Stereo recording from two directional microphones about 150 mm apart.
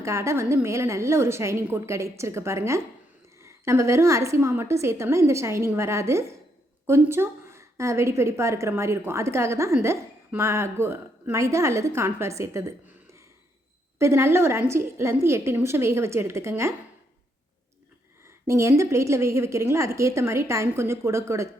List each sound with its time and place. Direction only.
0.0 s a woman's voice: 20° right (ahead or behind)
14.0 s a woman's voice: 20° right (ahead or behind)
18.3 s a woman's voice: 20° right (ahead or behind)